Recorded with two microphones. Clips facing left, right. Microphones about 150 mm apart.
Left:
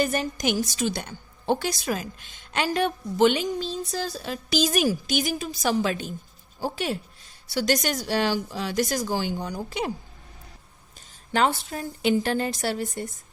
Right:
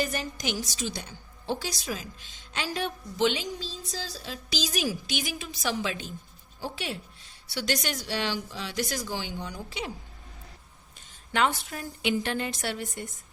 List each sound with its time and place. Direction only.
0.0 s a woman's voice: 50° left (ahead or behind)
11.3 s a woman's voice: 35° left (ahead or behind)